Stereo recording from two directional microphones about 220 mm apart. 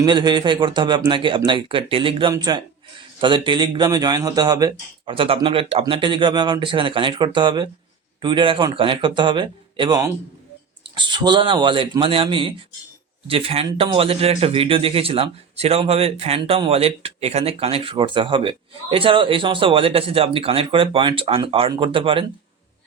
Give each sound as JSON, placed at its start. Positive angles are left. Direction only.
{"t": 0.0, "sound": "a man's voice", "side_deg": -20}